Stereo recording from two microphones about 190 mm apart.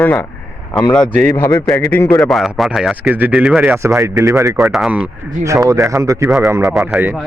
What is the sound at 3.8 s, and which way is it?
Speech, 15° right (ahead or behind).